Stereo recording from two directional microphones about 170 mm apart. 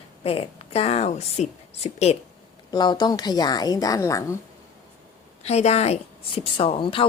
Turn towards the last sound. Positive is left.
turn(degrees=30)  # may be behind; listen again after turning